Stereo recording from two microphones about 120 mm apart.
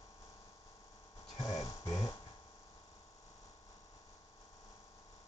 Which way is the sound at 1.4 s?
30° left (ahead or behind).